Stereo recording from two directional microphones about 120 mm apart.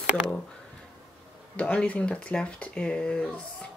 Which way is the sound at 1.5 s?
10° left (ahead or behind).